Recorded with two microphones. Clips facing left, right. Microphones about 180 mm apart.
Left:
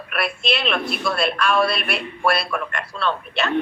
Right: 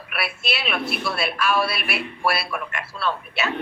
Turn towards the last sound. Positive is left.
turn(degrees=-5)  # may be behind; listen again after turning